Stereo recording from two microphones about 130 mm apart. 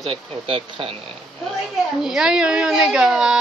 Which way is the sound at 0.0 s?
45° right (ahead or behind).